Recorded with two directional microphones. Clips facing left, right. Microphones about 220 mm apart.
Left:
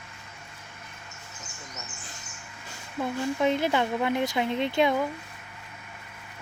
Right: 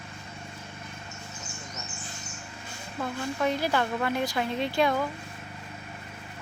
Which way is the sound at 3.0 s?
20° left (ahead or behind).